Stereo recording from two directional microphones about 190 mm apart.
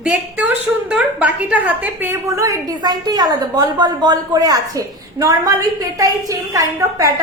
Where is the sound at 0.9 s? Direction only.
5° right (ahead or behind).